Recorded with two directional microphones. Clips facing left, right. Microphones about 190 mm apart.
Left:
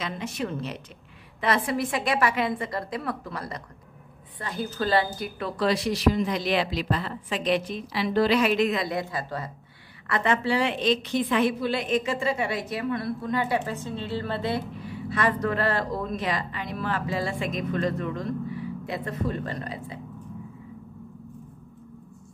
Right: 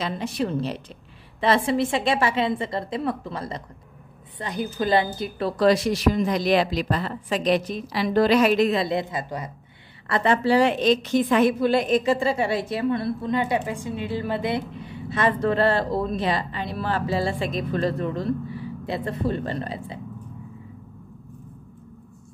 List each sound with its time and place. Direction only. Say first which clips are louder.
0.0 s a woman's voice: right 5 dB; 35° right (ahead or behind); by 5.3 s 20° right (ahead or behind)
5.4 s a woman's voice: right 6 dB; 45° right (ahead or behind); by 9.5 s 20° right (ahead or behind)
10.0 s a woman's voice: right 4 dB; 35° right (ahead or behind)